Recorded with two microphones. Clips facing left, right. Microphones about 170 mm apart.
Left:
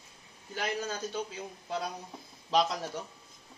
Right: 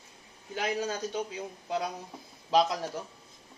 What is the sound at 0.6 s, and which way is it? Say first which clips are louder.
Speech: right 3 dB; 15° right (ahead or behind).